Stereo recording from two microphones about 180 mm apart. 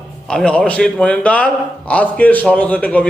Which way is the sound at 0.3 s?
5° left (ahead or behind).